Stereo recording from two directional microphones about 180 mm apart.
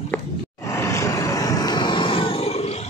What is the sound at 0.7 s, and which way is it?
Vehicle, 15° left (ahead or behind).